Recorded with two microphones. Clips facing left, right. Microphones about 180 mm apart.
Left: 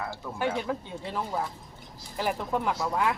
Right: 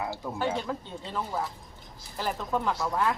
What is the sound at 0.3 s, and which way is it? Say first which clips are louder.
Speech: left 2 dB; 10° left (ahead or behind).